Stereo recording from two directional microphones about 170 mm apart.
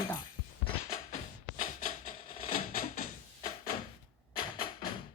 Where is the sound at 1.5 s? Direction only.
55° left (ahead or behind).